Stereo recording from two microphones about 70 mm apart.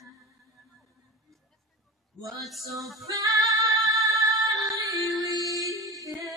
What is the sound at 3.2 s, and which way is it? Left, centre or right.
Music, right.